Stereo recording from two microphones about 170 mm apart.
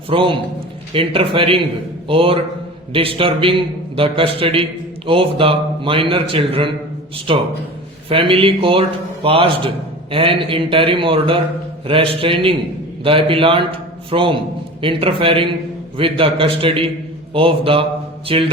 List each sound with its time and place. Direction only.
0.1 s a man's voice: 30° right (ahead or behind)